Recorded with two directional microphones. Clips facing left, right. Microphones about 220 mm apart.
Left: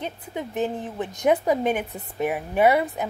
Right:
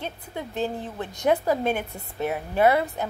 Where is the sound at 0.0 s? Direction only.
15° left (ahead or behind).